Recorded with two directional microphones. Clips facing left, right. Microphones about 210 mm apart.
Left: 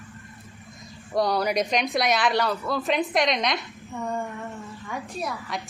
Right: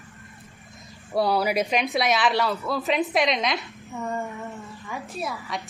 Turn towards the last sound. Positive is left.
turn(degrees=0)  # may be behind; listen again after turning